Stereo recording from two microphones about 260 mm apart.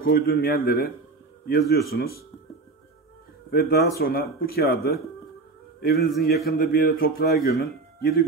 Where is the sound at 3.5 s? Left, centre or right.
Left.